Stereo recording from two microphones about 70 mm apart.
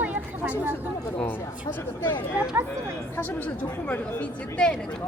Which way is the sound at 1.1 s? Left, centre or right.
Left.